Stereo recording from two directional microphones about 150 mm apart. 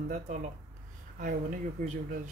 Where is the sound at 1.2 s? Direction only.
55° right (ahead or behind).